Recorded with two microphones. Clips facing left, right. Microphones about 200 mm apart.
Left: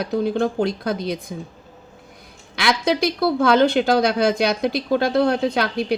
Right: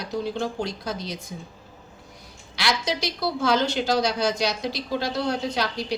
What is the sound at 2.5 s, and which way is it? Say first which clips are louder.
A woman's voice: left 7 dB; 55° left (ahead or behind).